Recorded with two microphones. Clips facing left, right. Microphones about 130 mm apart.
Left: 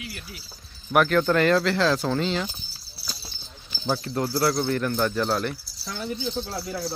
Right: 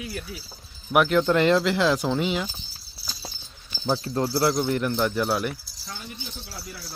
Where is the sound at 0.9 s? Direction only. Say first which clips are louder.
Even; 15° right (ahead or behind).